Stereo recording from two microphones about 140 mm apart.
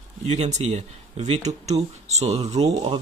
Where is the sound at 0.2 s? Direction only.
50° right (ahead or behind).